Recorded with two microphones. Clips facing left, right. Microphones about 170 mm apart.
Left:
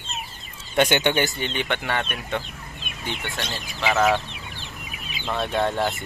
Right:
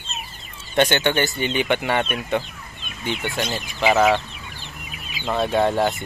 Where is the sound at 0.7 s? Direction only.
10° left (ahead or behind).